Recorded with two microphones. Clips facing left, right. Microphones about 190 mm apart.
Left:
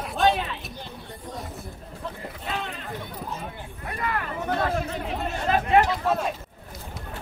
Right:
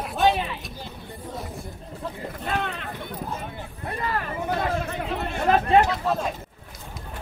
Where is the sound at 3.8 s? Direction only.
30° right (ahead or behind).